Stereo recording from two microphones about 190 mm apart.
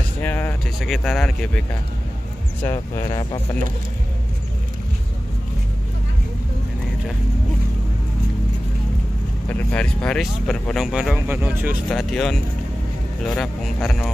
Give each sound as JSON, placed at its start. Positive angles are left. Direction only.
{"t": 0.2, "sound": "vehicle", "side_deg": 10}
{"t": 2.6, "sound": "speech", "side_deg": 15}
{"t": 9.5, "sound": "speech", "side_deg": 5}
{"t": 11.9, "sound": "speech", "side_deg": 5}